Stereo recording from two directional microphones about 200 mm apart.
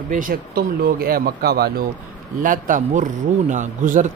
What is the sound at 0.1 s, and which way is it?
A man's voice, 45° right (ahead or behind).